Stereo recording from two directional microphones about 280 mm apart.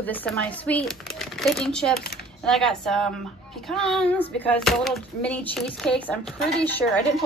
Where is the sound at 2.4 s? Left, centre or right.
Centre.